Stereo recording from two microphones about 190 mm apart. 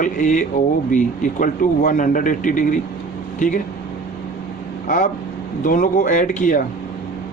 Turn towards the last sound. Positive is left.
turn(degrees=45)  # may be behind; listen again after turning